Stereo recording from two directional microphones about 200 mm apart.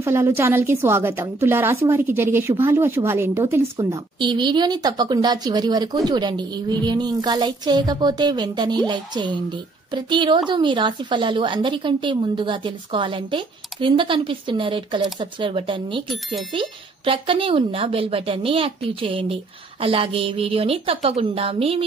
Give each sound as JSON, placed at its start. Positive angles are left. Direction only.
{"t": 0.0, "sound": "a woman's voice", "side_deg": -15}
{"t": 4.2, "sound": "a woman's voice", "side_deg": -20}